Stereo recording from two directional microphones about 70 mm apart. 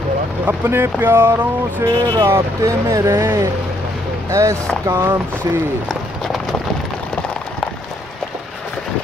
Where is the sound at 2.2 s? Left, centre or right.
Right.